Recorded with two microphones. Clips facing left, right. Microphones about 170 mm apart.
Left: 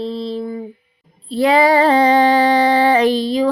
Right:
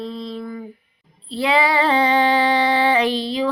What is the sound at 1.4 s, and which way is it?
Female singing, 45° left (ahead or behind).